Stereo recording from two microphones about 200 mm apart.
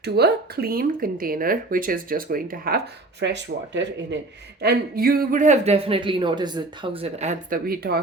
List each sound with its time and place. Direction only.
0.0 s speech: 55° right (ahead or behind)
4.6 s speech: 50° right (ahead or behind)